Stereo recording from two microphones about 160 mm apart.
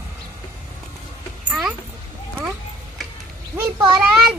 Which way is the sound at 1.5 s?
5° right (ahead or behind).